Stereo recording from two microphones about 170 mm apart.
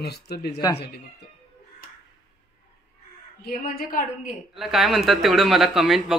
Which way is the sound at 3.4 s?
60° left (ahead or behind).